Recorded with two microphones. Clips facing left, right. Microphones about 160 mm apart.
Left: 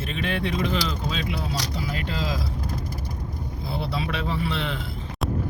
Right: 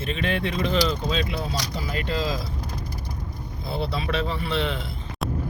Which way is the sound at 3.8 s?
10° left (ahead or behind).